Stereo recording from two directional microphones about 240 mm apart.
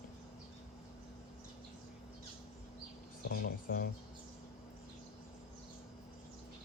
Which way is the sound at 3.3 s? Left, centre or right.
Left.